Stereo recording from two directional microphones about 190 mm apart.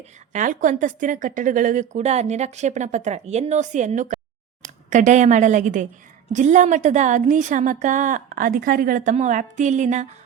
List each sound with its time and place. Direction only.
0.3 s a woman's voice: 40° right (ahead or behind)